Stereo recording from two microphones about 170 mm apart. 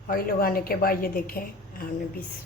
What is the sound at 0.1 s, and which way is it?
A woman's voice, 60° left (ahead or behind).